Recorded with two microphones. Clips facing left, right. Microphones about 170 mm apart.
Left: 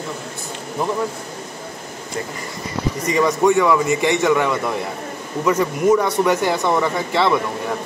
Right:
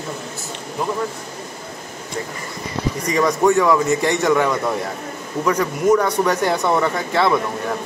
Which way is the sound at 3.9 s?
10° left (ahead or behind).